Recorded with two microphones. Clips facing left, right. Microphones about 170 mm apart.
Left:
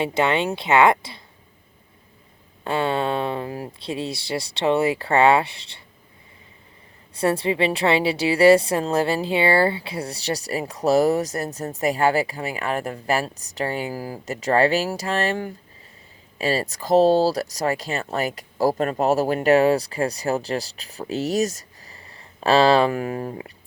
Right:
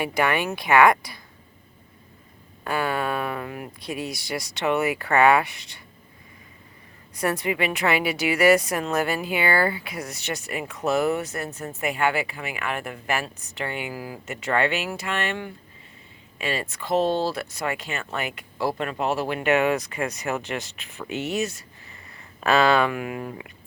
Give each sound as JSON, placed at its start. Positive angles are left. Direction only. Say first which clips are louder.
{"t": 0.0, "sound": "speech", "louder": "left 3 dB", "side_deg": 25}
{"t": 2.6, "sound": "speech", "louder": "left 3 dB", "side_deg": 25}
{"t": 7.1, "sound": "a woman's voice", "louder": "left 4 dB", "side_deg": 30}